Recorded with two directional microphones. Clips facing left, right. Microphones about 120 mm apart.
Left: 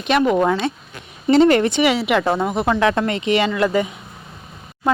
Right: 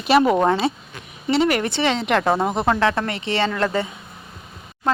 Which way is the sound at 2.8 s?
20° left (ahead or behind).